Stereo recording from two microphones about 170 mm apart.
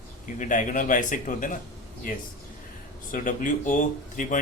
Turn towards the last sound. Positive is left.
turn(degrees=50)  # may be behind; listen again after turning